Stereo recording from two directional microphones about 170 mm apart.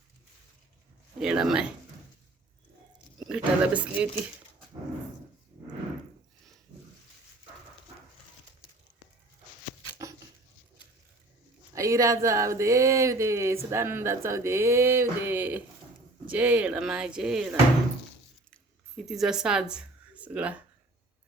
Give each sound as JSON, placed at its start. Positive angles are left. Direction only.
{"t": 1.2, "sound": "speech", "side_deg": -5}
{"t": 3.2, "sound": "speech", "side_deg": -5}
{"t": 11.7, "sound": "speech", "side_deg": -20}
{"t": 18.5, "sound": "a sound", "side_deg": 0}